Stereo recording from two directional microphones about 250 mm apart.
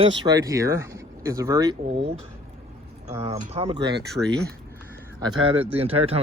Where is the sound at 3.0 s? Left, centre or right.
Right.